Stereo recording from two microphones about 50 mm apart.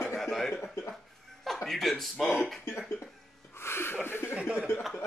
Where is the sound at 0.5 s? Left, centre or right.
Left.